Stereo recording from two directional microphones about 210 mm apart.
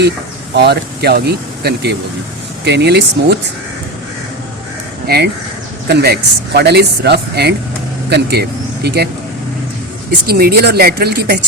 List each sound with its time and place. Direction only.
0.5 s speech: 50° right (ahead or behind)
5.0 s speech: 50° right (ahead or behind)
10.2 s speech: 45° right (ahead or behind)